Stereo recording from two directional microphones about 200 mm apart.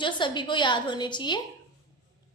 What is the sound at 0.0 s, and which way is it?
A woman's voice, 25° left (ahead or behind).